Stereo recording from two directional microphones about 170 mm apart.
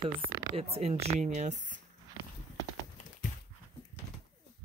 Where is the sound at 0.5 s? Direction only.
35° right (ahead or behind).